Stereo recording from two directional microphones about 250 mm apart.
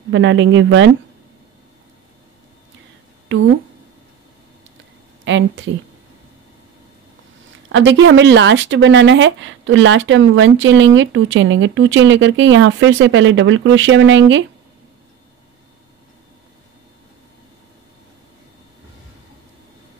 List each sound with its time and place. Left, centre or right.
0.1 s speech: right
3.3 s speech: right
5.2 s speech: right
7.7 s speech: right